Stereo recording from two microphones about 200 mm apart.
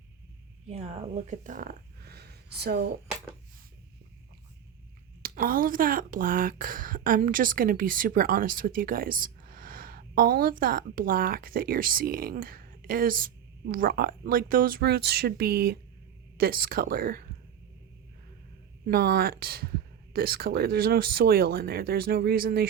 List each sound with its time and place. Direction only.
0.7 s speech: 30° right (ahead or behind); by 2.9 s 55° right (ahead or behind)
5.2 s speech: 45° right (ahead or behind)
18.9 s speech: 50° right (ahead or behind)